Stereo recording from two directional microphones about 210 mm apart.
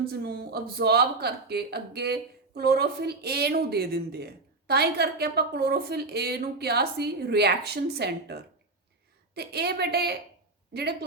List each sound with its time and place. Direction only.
0.1 s a woman's voice: 50° right (ahead or behind)